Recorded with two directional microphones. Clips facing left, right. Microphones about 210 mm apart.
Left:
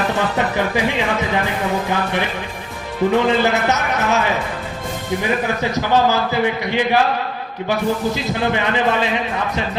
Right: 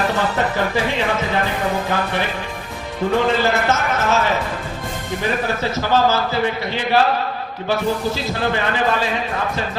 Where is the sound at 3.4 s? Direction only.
20° left (ahead or behind).